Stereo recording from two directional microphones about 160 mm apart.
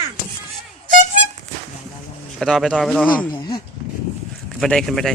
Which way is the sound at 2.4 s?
Centre (ahead or behind).